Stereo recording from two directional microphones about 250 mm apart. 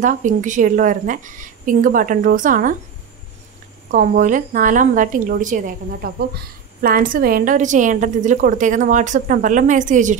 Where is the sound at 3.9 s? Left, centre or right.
Right.